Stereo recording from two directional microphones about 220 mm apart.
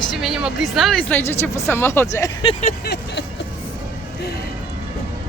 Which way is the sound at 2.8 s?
50° left (ahead or behind).